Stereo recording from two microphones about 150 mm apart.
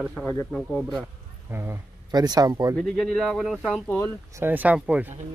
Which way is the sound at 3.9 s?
10° left (ahead or behind).